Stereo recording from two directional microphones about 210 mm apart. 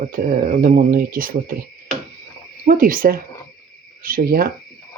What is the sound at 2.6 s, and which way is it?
Speech, 40° right (ahead or behind).